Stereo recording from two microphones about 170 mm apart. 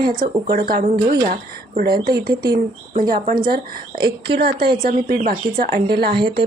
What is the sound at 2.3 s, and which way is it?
Speech, 25° right (ahead or behind).